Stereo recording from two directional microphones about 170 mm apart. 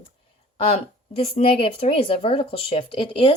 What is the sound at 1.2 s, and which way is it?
Speech, 35° left (ahead or behind).